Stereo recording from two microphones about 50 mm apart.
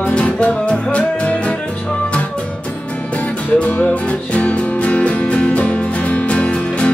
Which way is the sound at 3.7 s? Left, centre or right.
Left.